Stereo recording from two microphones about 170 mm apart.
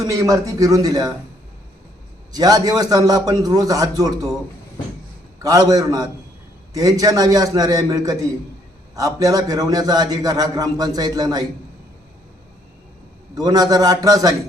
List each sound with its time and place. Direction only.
0.0 s a man's voice: 20° right (ahead or behind)
2.3 s a man's voice: 25° right (ahead or behind)
5.4 s a man's voice: 20° right (ahead or behind)
13.3 s a man's voice: 20° right (ahead or behind)